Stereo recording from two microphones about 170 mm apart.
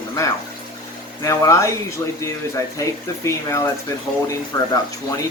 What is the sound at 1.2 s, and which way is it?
Speech, 20° left (ahead or behind).